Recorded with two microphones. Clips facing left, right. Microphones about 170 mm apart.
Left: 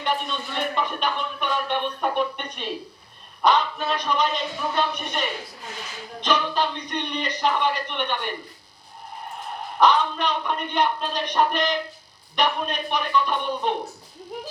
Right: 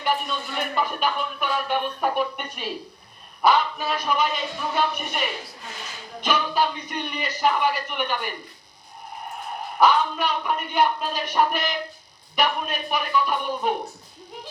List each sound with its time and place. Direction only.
0.0 s a man's voice: 5° right (ahead or behind)
9.7 s a man's voice: 5° right (ahead or behind)